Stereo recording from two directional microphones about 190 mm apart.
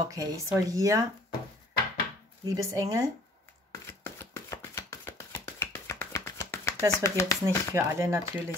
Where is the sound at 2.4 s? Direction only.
20° right (ahead or behind).